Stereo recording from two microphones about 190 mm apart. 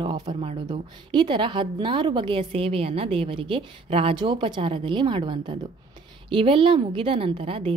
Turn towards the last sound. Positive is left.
turn(degrees=-30)  # may be behind; listen again after turning